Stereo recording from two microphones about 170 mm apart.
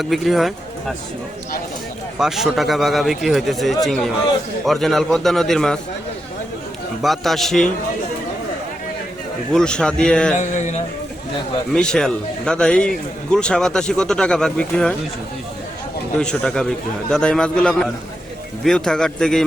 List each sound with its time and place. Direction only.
0.0 s a man's voice: centre (ahead or behind)
2.1 s a man's voice: centre (ahead or behind)
7.0 s a man's voice: centre (ahead or behind)
9.5 s a man's voice: 5° left (ahead or behind)
10.3 s music: 45° left (ahead or behind)
11.7 s a man's voice: 5° left (ahead or behind)
16.1 s a man's voice: 5° left (ahead or behind)